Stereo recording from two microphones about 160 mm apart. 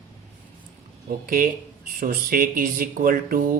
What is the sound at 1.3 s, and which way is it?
Speech, 65° right (ahead or behind).